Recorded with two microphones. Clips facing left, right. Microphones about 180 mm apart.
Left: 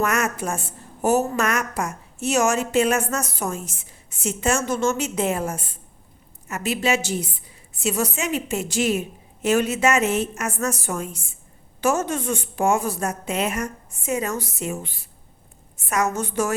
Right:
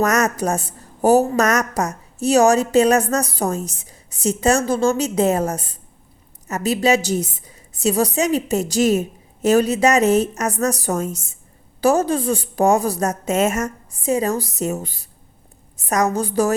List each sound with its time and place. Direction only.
0.0 s a woman's voice: 40° right (ahead or behind)